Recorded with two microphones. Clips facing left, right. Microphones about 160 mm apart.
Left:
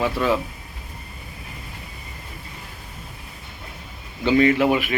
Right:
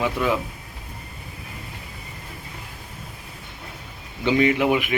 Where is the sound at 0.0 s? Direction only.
15° right (ahead or behind).